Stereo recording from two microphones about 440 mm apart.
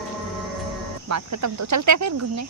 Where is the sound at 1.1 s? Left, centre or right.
Right.